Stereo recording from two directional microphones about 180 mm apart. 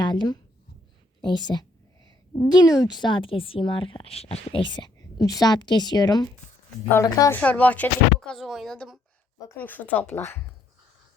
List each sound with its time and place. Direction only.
0.0 s a woman's voice: 25° left (ahead or behind)